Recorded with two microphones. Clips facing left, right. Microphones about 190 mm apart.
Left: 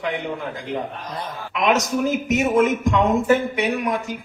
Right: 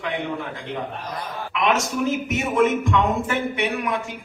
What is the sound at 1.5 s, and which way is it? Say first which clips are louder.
A man's voice: left 3 dB; 40° left (ahead or behind).